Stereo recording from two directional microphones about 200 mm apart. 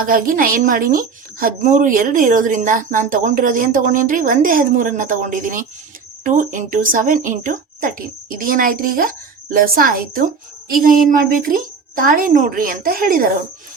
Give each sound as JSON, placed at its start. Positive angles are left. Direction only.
{"t": 0.0, "sound": "speech", "side_deg": -45}